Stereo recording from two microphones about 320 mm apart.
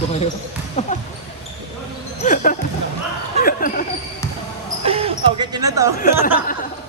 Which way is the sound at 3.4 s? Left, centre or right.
Left.